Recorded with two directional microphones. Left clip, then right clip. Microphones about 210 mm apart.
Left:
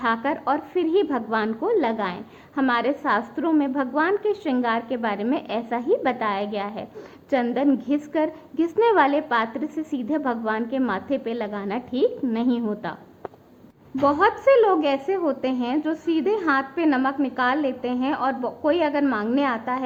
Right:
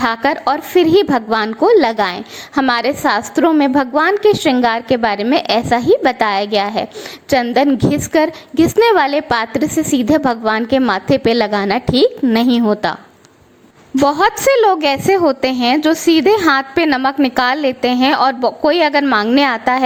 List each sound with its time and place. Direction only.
0.0 s a woman's voice: 35° right (ahead or behind)
14.1 s a woman's voice: 40° right (ahead or behind)